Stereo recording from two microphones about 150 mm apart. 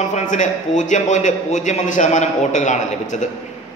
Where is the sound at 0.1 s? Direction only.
55° left (ahead or behind).